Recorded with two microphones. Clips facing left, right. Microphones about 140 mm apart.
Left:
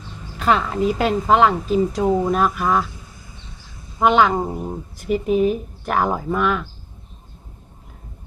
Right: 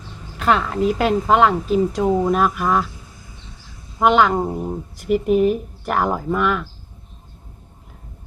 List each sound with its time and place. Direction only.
0.3 s speech: centre (ahead or behind)
4.0 s speech: centre (ahead or behind)